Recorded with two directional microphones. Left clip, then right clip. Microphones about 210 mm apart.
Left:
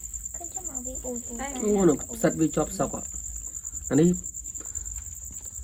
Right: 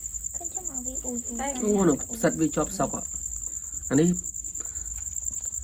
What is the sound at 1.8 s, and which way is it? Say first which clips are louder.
Speech: left 2 dB; 25° right (ahead or behind).